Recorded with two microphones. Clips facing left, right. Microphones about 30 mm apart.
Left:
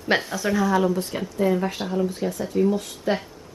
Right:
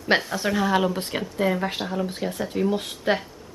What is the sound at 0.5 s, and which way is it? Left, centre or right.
Speech, right.